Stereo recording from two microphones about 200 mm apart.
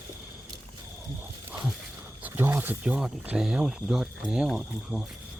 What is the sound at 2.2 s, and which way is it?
Speech, 10° right (ahead or behind).